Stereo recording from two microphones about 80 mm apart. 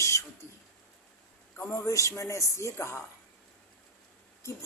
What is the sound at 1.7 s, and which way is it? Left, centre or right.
A woman's voice, left.